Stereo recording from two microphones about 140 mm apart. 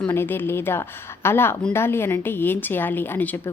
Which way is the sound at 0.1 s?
15° left (ahead or behind).